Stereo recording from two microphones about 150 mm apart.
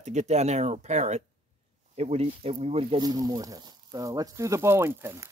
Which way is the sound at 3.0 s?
25° right (ahead or behind).